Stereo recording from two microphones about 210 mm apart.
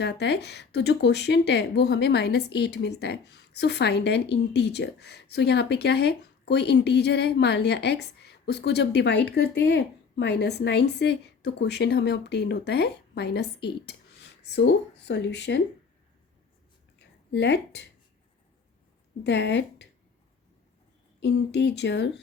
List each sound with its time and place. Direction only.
0.0 s speech: 55° left (ahead or behind)
17.0 s a sound: 55° left (ahead or behind)
19.2 s speech: 55° left (ahead or behind)
21.2 s speech: 55° left (ahead or behind)